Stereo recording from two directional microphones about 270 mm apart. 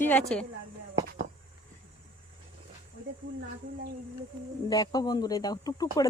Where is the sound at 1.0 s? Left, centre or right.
Right.